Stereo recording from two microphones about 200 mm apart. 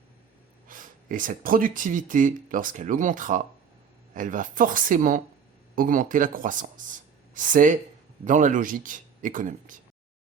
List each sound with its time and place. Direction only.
0.7 s speech: 40° right (ahead or behind)